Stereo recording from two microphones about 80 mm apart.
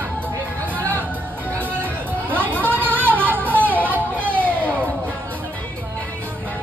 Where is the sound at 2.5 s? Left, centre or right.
Right.